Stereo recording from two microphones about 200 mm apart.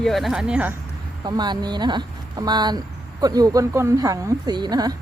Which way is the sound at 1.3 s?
20° right (ahead or behind).